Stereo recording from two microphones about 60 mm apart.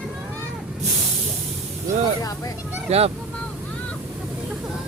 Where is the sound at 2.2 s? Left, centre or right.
Left.